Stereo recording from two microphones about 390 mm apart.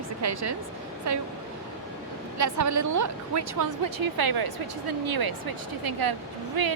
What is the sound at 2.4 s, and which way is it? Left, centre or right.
A woman's voice, right.